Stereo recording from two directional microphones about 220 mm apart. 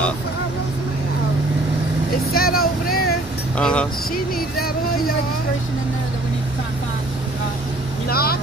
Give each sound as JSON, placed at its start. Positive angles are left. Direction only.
{"t": 2.3, "sound": "speech", "side_deg": 45}
{"t": 3.5, "sound": "speech", "side_deg": 5}
{"t": 8.1, "sound": "speech", "side_deg": 45}